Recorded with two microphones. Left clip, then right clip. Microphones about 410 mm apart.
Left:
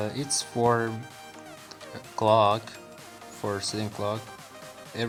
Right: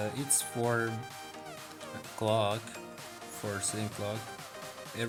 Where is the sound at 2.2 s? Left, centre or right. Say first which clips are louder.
Left 9 dB; right.